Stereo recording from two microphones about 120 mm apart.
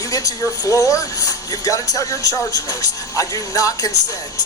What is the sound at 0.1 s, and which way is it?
Speech, 30° left (ahead or behind).